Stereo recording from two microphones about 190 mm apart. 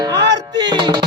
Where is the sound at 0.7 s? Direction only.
20° right (ahead or behind).